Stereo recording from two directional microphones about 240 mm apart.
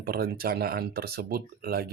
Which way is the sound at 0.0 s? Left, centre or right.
Right.